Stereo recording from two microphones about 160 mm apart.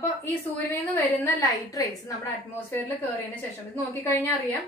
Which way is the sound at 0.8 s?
15° left (ahead or behind).